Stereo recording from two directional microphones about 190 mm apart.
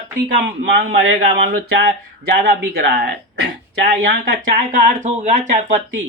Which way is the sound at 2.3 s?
50° right (ahead or behind).